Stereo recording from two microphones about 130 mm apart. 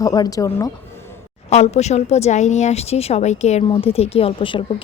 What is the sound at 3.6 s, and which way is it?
Speech, 45° left (ahead or behind).